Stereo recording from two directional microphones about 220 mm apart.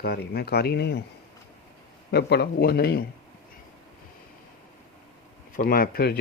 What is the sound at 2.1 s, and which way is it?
Speech, 45° left (ahead or behind).